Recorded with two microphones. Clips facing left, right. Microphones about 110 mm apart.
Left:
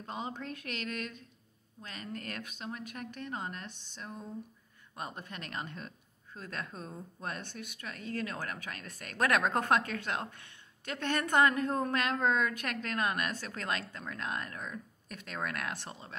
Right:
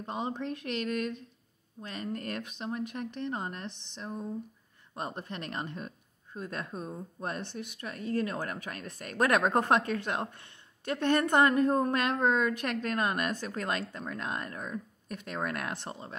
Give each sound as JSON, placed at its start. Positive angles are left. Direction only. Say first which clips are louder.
{"t": 0.0, "sound": "a woman's voice", "louder": "right 5 dB", "side_deg": -25}
{"t": 6.7, "sound": "speech", "louder": "right 6 dB", "side_deg": -10}
{"t": 7.2, "sound": "a woman's voice", "louder": "right 4 dB", "side_deg": -25}
{"t": 15.9, "sound": "speech", "louder": "right 5 dB", "side_deg": -35}